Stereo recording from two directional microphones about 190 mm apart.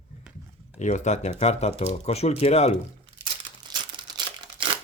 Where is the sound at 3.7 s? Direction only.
25° right (ahead or behind).